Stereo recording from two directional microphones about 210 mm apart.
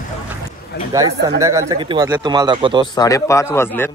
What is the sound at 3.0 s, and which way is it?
Speech, 15° left (ahead or behind).